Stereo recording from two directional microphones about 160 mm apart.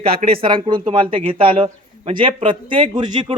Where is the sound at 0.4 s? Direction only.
30° right (ahead or behind).